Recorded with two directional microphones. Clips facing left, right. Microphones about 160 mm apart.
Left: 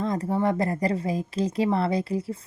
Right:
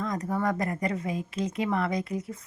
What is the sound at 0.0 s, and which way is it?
Speech, 30° left (ahead or behind).